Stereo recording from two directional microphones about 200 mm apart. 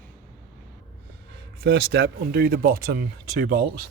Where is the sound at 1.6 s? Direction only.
60° right (ahead or behind).